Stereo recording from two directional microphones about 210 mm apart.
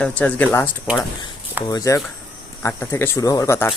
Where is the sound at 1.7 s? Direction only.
15° left (ahead or behind).